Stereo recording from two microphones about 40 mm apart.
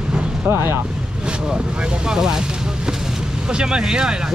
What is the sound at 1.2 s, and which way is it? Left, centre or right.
Speech, right.